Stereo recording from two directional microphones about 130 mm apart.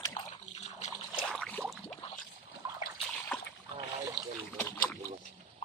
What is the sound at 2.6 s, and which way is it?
Splash, 30° right (ahead or behind).